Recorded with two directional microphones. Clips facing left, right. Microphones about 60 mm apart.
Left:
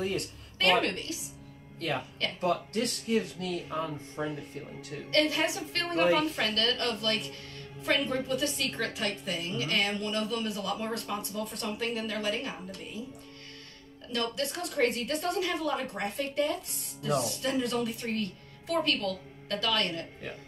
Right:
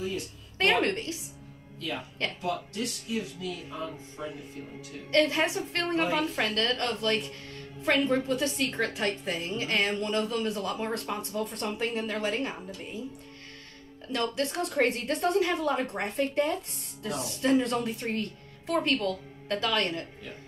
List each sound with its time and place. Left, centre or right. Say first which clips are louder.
0.0 s a sound: left 2 dB; left
0.6 s a woman's voice: right 1 dB; right
1.8 s speech: left 1 dB; left
5.1 s a woman's voice: right 3 dB; right
14.1 s a woman's voice: right 3 dB; right